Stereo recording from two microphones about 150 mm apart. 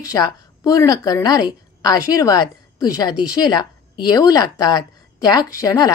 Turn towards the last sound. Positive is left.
turn(degrees=25)  # may be behind; listen again after turning